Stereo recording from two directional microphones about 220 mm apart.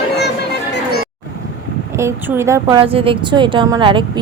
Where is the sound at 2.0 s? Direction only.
10° right (ahead or behind).